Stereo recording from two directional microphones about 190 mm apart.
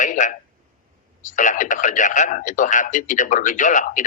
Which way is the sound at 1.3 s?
40° left (ahead or behind).